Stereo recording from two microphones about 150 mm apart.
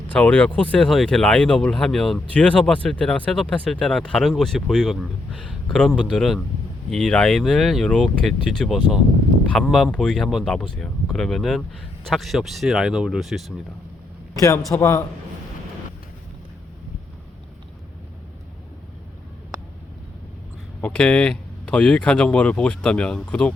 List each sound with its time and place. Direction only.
0.1 s speech: 10° left (ahead or behind)
14.7 s speech: 20° left (ahead or behind)
20.8 s speech: 5° left (ahead or behind)